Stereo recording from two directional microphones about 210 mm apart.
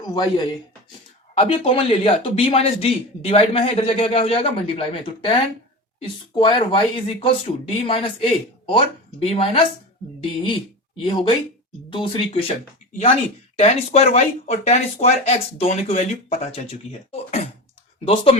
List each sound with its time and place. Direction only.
0.0 s speech: 20° left (ahead or behind)
13.6 s speech: 30° left (ahead or behind)